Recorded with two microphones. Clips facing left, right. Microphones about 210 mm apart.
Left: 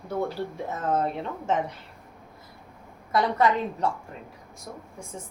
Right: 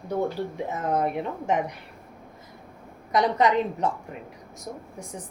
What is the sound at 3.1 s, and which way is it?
Speech, 20° right (ahead or behind).